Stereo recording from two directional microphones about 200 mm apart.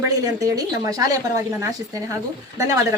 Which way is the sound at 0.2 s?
15° right (ahead or behind).